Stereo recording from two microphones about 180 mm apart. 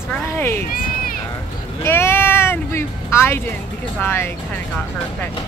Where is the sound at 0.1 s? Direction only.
10° left (ahead or behind).